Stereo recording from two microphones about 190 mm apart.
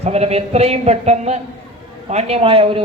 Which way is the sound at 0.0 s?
35° right (ahead or behind).